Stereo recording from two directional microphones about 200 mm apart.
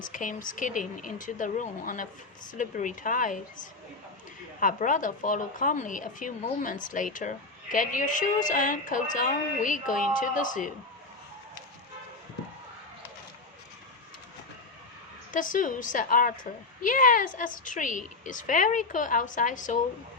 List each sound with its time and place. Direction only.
0.0 s a woman's voice: 40° left (ahead or behind)
15.3 s a woman's voice: 40° left (ahead or behind)